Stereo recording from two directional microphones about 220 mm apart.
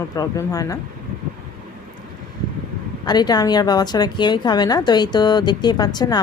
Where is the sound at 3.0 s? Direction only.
20° left (ahead or behind).